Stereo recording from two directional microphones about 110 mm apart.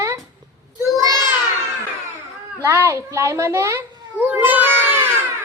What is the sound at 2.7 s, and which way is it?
A child's voice, 25° right (ahead or behind).